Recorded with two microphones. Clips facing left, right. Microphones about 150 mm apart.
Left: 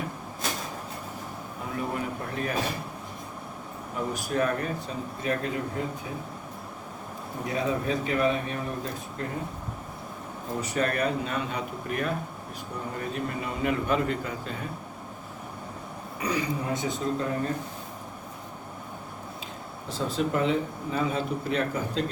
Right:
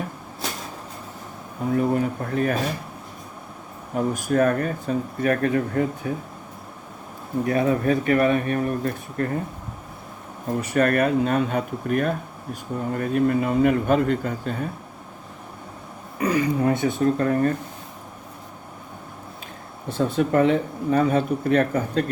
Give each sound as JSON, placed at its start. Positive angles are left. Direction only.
{"t": 1.7, "sound": "speech", "side_deg": -45}
{"t": 3.9, "sound": "speech", "side_deg": -45}
{"t": 7.4, "sound": "speech", "side_deg": -60}
{"t": 10.6, "sound": "speech", "side_deg": -55}
{"t": 16.2, "sound": "speech", "side_deg": -55}
{"t": 19.9, "sound": "speech", "side_deg": -55}